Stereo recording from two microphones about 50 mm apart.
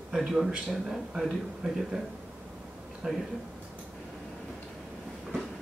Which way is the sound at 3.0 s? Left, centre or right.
Centre.